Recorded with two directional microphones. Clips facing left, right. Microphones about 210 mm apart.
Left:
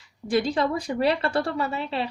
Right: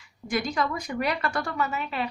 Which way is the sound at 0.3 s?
30° left (ahead or behind).